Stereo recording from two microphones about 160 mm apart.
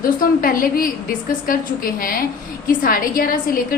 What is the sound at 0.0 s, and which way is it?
A woman's voice, 60° left (ahead or behind).